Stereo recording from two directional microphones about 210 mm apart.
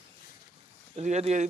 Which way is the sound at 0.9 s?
30° right (ahead or behind).